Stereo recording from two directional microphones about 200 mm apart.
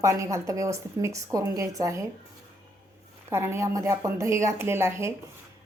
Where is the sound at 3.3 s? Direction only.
15° right (ahead or behind).